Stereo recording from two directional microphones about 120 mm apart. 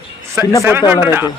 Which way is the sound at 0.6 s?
20° right (ahead or behind).